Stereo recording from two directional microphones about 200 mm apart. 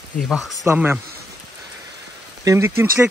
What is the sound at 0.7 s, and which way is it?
Speech, 10° right (ahead or behind).